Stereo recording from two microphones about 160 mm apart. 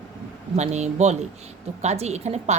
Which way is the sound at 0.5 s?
45° right (ahead or behind).